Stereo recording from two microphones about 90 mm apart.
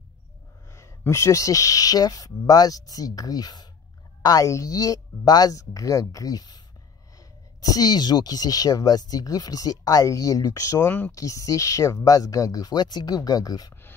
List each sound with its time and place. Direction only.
0.7 s speech: 35° left (ahead or behind)